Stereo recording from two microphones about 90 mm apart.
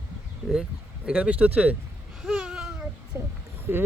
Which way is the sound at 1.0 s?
15° right (ahead or behind).